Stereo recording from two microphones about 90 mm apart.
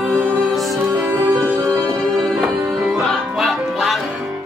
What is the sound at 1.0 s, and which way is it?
Music, 20° right (ahead or behind).